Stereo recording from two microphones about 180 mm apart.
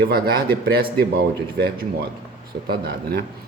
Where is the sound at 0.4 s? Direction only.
60° right (ahead or behind).